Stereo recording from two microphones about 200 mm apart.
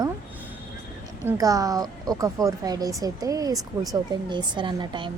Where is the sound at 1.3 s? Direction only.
15° right (ahead or behind).